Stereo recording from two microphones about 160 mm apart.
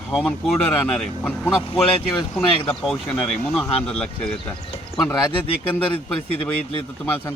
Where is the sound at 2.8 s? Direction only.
Centre (ahead or behind).